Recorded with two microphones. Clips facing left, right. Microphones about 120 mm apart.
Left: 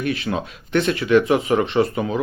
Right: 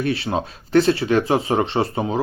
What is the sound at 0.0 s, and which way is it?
Speech, 30° right (ahead or behind).